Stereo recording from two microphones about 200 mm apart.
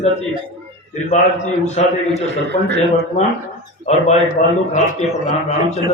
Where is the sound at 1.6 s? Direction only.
35° left (ahead or behind).